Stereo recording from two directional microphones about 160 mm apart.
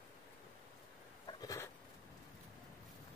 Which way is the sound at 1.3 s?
25° left (ahead or behind).